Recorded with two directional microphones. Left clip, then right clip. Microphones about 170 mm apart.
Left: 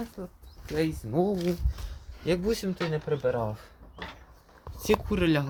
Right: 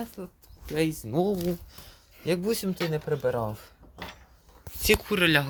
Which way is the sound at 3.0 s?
45° right (ahead or behind).